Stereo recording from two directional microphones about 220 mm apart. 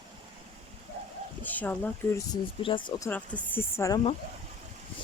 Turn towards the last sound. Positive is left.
turn(degrees=10)  # may be behind; listen again after turning